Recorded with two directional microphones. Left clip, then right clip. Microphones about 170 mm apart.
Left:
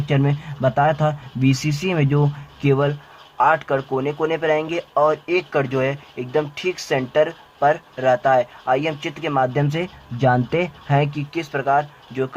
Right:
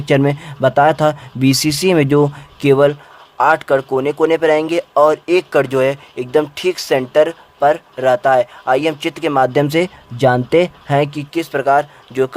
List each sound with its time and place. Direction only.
0.1 s speech: 45° right (ahead or behind)
4.9 s speech: 35° right (ahead or behind)
5.2 s speech: 50° right (ahead or behind); by 8.4 s 25° right (ahead or behind)
8.6 s speech: 45° right (ahead or behind)
10.2 s speech: 30° right (ahead or behind); by 12.3 s 45° right (ahead or behind)